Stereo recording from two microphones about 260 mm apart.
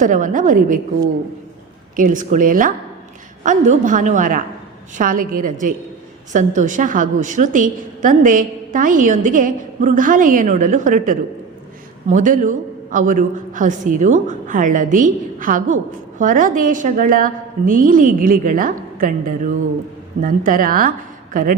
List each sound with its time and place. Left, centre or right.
0.0 s a man's voice: right
2.0 s a man's voice: right